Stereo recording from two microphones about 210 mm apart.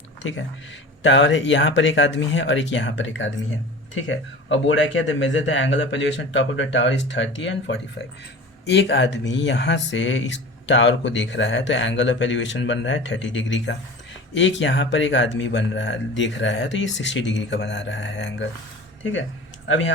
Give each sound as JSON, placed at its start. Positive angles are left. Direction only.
{"t": 0.2, "sound": "speech", "side_deg": 60}